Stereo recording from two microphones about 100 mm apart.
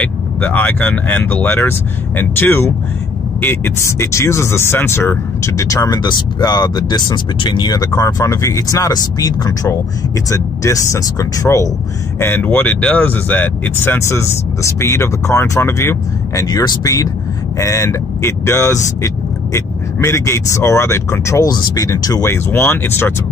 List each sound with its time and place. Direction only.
0.0 s speech: 15° left (ahead or behind); by 11.7 s 35° left (ahead or behind)
12.2 s speech: 20° left (ahead or behind)
16.4 s speech: 40° left (ahead or behind)
21.5 s speech: 40° left (ahead or behind); by 23.1 s 20° left (ahead or behind)